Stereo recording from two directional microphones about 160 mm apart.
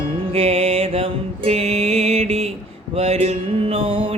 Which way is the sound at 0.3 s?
40° right (ahead or behind).